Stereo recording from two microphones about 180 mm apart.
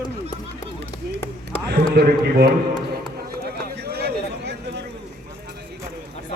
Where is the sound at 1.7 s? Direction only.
65° right (ahead or behind).